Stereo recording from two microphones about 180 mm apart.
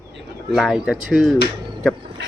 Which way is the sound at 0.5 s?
Centre (ahead or behind).